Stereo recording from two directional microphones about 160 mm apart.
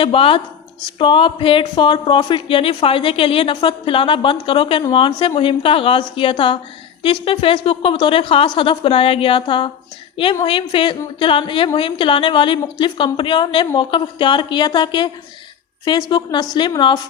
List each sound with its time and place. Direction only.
0.0 s a woman's voice: 35° left (ahead or behind)